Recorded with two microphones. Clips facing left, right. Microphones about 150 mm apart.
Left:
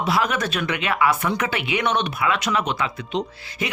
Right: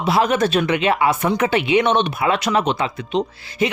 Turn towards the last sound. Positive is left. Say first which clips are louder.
# right 8 dB
turn(degrees=-30)  # may be behind; listen again after turning